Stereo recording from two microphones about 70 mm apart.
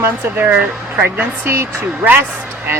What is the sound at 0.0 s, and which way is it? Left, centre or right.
Speech, right.